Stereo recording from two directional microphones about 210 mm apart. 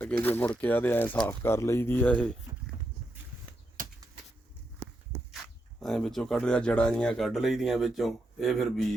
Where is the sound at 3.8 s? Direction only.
40° right (ahead or behind).